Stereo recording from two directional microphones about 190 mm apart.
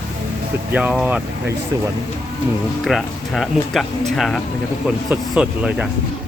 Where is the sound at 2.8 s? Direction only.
Centre (ahead or behind).